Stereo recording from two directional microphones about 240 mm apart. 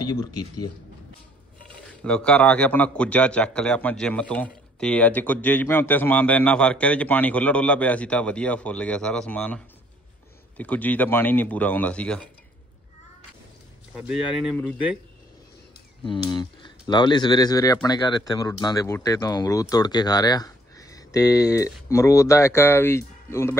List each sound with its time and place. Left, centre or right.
0.0 s speech: centre
2.0 s speech: centre
10.6 s speech: centre
13.9 s speech: centre
16.0 s speech: centre